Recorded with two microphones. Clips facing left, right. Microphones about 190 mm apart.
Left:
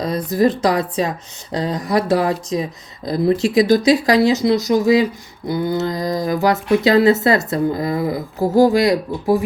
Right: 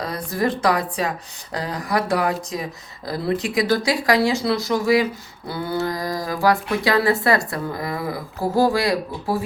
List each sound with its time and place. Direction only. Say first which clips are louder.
0.0 s speech: left 7 dB; 20° left (ahead or behind)